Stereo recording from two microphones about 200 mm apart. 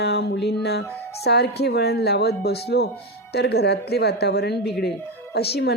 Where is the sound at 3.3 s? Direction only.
55° left (ahead or behind).